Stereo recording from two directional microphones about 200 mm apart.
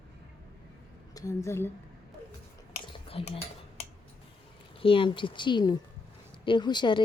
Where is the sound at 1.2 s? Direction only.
15° left (ahead or behind).